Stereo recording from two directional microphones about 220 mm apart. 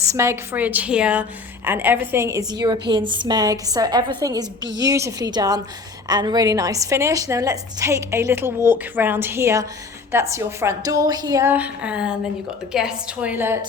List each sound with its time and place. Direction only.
0.0 s a woman's voice: 15° right (ahead or behind)